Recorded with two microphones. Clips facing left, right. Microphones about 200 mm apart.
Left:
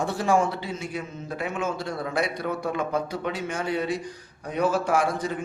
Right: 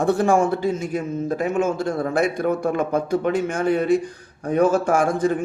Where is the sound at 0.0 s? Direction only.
50° right (ahead or behind).